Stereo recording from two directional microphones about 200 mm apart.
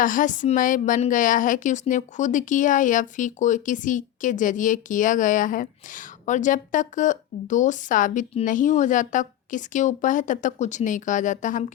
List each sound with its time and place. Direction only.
0.0 s a woman's voice: 40° left (ahead or behind)